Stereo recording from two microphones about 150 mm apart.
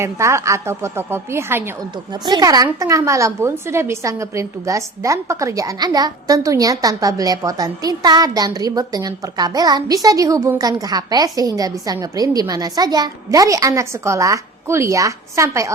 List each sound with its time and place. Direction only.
0.0 s a woman's voice: 20° right (ahead or behind)
2.2 s a woman's voice: 25° right (ahead or behind)